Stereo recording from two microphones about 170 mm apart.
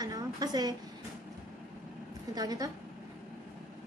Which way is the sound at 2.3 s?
20° right (ahead or behind).